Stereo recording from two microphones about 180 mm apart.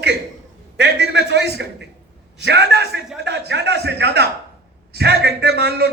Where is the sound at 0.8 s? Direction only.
70° right (ahead or behind).